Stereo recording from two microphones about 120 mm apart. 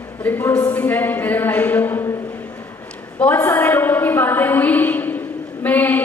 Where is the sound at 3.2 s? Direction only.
20° left (ahead or behind).